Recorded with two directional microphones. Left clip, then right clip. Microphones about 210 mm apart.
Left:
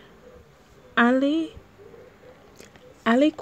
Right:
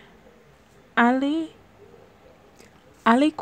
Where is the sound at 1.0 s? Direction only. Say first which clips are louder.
Even; centre (ahead or behind).